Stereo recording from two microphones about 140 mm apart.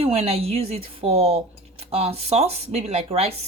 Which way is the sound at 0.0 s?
45° right (ahead or behind).